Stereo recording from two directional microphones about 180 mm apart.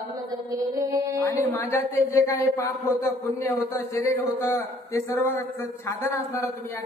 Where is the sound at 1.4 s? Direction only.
15° left (ahead or behind).